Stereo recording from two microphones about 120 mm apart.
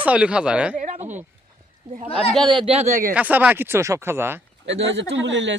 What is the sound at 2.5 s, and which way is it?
Speech, 45° right (ahead or behind).